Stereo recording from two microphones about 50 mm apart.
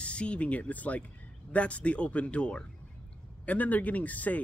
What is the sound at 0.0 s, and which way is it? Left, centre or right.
A man's voice, left.